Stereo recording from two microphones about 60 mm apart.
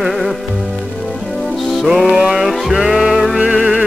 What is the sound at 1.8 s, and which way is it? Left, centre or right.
Music, centre.